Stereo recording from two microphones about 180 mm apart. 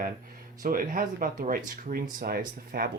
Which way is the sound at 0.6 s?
50° right (ahead or behind).